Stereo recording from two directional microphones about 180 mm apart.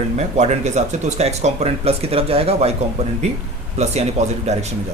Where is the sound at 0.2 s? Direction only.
40° right (ahead or behind).